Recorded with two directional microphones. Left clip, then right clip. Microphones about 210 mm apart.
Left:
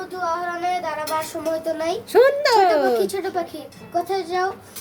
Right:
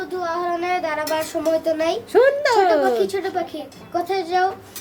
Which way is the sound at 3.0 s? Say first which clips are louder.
Right 1 dB; 15° left (ahead or behind).